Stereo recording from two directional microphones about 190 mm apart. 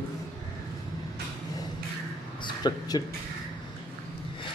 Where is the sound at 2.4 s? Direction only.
20° left (ahead or behind).